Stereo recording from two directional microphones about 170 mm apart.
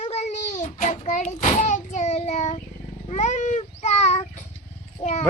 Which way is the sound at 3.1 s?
45° left (ahead or behind).